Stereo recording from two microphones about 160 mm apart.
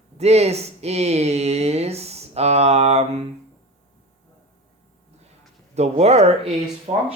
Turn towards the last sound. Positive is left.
turn(degrees=-45)  # may be behind; listen again after turning